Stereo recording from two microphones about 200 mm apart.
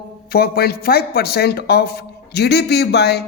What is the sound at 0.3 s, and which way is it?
A woman's voice, 50° left (ahead or behind).